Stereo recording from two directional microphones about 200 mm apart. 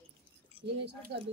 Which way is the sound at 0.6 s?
25° right (ahead or behind).